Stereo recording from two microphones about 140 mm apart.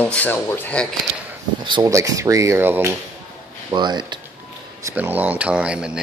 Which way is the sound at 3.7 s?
30° right (ahead or behind).